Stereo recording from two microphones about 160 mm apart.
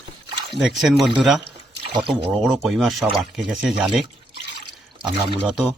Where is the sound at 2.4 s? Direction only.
Centre (ahead or behind).